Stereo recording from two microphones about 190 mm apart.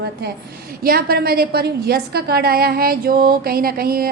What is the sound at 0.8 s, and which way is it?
A woman's voice, 50° right (ahead or behind).